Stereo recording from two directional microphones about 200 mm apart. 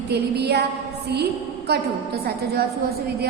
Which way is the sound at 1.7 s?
50° right (ahead or behind).